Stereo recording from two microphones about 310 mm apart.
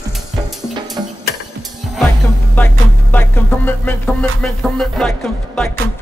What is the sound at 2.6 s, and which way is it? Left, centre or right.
Music, centre.